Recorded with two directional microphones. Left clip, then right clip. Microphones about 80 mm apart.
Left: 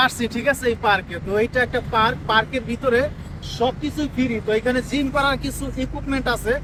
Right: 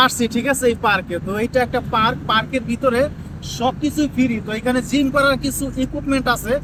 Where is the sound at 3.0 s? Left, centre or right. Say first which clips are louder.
Right 1 dB; left.